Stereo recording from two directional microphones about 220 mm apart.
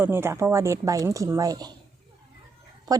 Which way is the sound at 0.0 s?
10° right (ahead or behind).